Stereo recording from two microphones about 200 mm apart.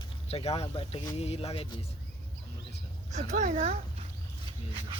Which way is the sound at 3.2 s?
35° right (ahead or behind).